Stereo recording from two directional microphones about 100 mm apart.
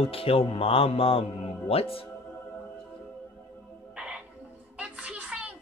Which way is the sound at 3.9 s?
10° right (ahead or behind).